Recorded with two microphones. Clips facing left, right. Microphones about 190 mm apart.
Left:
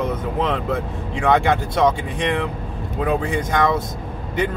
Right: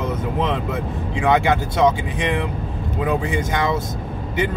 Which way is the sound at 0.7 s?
5° right (ahead or behind).